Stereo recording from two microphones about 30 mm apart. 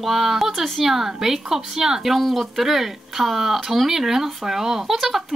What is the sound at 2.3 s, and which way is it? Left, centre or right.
Speech, centre.